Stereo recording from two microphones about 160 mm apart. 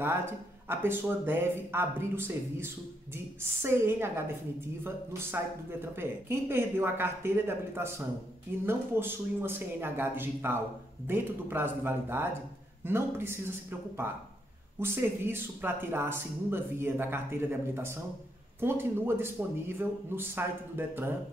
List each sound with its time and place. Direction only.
0.7 s speech: 15° right (ahead or behind)